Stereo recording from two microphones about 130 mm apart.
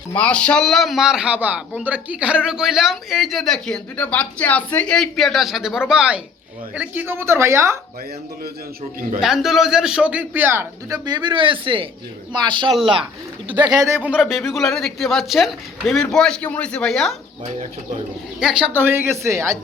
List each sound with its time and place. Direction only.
0.1 s a man's voice: 10° left (ahead or behind); by 7.8 s 20° right (ahead or behind)
9.2 s a man's voice: 5° right (ahead or behind); by 14.0 s 25° right (ahead or behind)
14.0 s a man's voice: 5° right (ahead or behind)
18.3 s a man's voice: 5° right (ahead or behind)
18.8 s speech: 15° right (ahead or behind)